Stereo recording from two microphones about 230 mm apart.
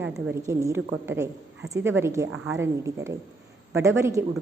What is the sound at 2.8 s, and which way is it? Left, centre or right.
A woman's voice, centre.